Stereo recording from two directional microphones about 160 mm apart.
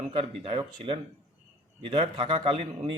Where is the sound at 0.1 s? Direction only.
35° right (ahead or behind).